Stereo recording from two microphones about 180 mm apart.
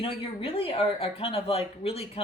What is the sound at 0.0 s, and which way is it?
Speech, 30° left (ahead or behind).